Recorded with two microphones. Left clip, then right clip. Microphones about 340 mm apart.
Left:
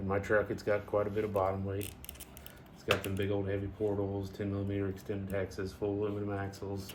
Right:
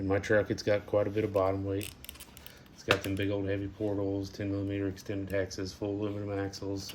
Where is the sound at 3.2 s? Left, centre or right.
Right.